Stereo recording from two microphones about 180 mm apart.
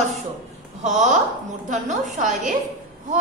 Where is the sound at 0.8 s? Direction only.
40° right (ahead or behind).